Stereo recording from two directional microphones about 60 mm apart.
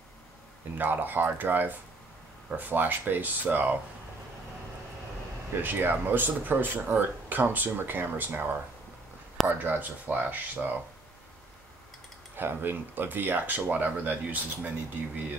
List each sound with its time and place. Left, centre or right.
0.7 s speech: right
5.5 s speech: right
9.6 s speech: right
12.4 s speech: right